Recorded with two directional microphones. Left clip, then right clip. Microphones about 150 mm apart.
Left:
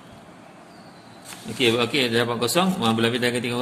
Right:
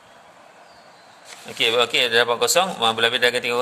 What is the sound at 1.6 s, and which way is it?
A man's voice, 50° right (ahead or behind).